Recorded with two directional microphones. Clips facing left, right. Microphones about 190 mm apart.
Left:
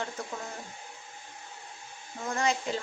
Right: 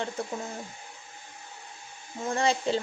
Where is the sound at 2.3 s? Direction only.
30° right (ahead or behind).